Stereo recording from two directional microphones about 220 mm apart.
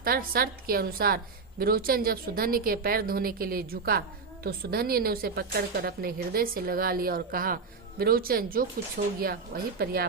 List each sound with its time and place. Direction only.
0.0 s a woman's voice: 40° right (ahead or behind)